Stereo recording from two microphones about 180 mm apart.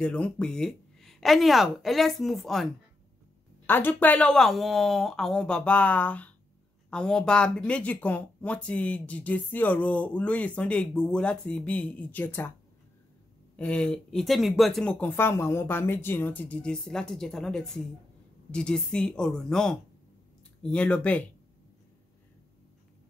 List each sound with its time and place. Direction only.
0.0 s speech: 5° left (ahead or behind)
13.6 s speech: 5° left (ahead or behind)